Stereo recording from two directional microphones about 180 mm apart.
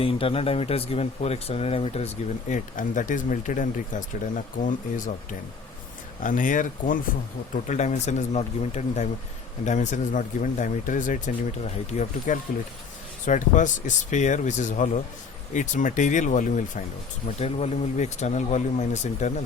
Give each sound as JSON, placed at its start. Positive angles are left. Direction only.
{"t": 0.0, "sound": "speech", "side_deg": 30}
{"t": 6.2, "sound": "speech", "side_deg": 45}